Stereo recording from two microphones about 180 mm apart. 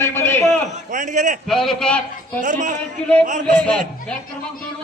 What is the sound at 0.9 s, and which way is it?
Speech, 45° right (ahead or behind).